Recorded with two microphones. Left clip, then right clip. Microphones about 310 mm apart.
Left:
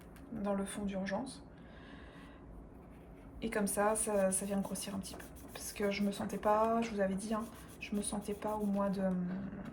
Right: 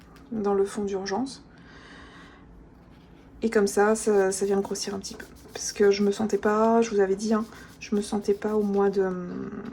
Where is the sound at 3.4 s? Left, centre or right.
Centre.